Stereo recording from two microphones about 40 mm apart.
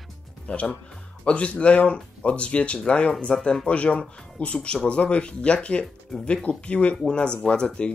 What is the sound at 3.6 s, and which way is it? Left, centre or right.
Speech, left.